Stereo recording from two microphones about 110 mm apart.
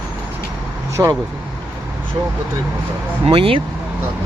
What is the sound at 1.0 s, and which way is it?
Speech, 25° right (ahead or behind).